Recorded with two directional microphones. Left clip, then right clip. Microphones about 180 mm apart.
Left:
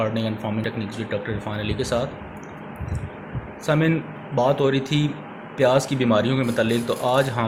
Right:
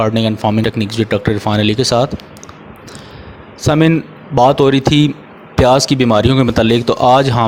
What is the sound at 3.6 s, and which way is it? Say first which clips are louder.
Speech: right 9 dB; 55° right (ahead or behind).